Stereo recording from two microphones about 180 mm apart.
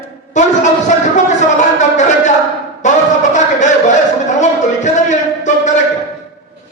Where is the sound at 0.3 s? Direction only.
40° left (ahead or behind).